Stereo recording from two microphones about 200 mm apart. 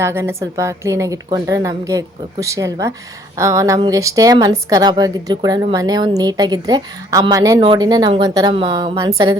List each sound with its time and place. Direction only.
0.0 s a woman's voice: 10° right (ahead or behind)